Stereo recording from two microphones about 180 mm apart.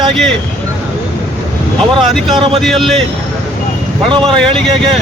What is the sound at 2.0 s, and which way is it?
Speech, centre (ahead or behind).